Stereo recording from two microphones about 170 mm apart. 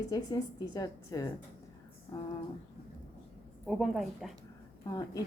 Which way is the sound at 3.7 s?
Centre (ahead or behind).